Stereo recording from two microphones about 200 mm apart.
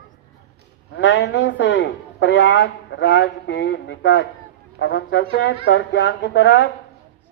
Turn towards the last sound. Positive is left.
turn(degrees=75)  # may be behind; listen again after turning